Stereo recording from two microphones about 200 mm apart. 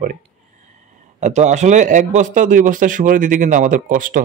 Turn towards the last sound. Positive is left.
turn(degrees=-40)  # may be behind; listen again after turning